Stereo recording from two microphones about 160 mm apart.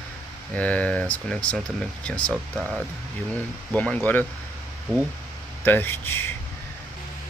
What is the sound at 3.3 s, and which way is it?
Speech, 10° left (ahead or behind).